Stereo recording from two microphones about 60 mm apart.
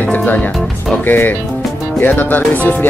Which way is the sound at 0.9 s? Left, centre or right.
Left.